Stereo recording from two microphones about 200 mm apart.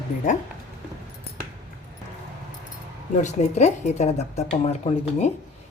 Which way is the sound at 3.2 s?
35° left (ahead or behind).